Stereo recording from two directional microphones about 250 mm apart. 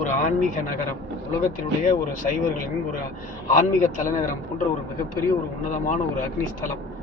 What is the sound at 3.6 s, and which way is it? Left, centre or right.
Speech, left.